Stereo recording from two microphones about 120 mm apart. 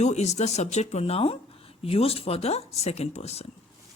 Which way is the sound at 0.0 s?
65° left (ahead or behind).